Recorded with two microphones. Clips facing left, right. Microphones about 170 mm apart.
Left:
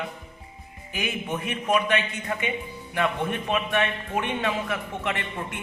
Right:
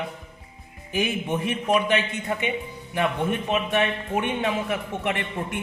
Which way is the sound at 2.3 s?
20° right (ahead or behind).